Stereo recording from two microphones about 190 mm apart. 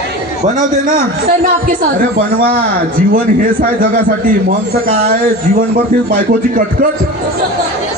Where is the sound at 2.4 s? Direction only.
50° right (ahead or behind).